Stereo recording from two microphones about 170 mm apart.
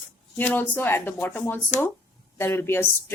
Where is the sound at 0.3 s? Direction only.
10° left (ahead or behind).